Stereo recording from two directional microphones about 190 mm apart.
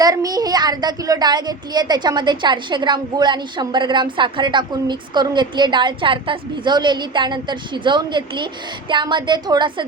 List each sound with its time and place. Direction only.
0.0 s a child's voice: 20° right (ahead or behind)